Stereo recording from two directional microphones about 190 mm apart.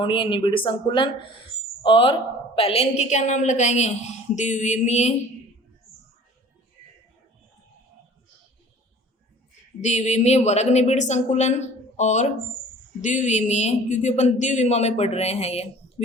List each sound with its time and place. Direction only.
0.0 s speech: 25° left (ahead or behind)
9.8 s speech: 40° left (ahead or behind)